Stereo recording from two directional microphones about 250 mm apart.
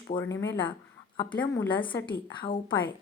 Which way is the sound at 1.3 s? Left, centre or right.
Centre.